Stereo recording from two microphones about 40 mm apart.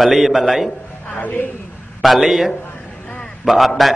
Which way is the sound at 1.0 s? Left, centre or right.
Left.